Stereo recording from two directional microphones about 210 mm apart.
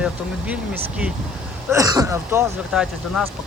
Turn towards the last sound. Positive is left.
turn(degrees=-5)  # may be behind; listen again after turning